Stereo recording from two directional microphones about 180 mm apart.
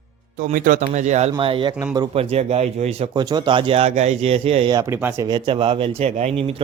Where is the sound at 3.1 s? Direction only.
20° right (ahead or behind).